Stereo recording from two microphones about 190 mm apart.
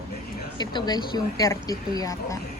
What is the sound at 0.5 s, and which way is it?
A woman's voice, 20° left (ahead or behind).